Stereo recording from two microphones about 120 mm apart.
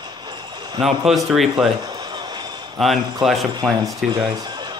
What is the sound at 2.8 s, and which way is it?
Speech, centre (ahead or behind).